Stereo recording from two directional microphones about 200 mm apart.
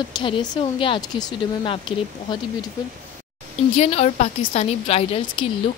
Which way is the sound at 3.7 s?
30° left (ahead or behind).